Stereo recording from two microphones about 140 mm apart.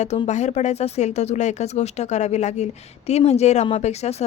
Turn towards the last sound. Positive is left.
turn(degrees=50)  # may be behind; listen again after turning